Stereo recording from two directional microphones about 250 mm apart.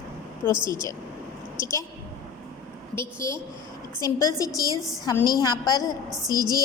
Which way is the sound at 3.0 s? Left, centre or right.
Centre.